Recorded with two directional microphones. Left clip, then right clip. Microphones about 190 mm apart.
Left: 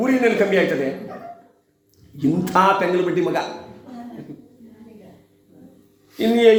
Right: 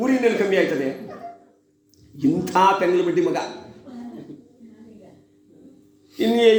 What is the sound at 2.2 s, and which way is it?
Speech, 15° left (ahead or behind).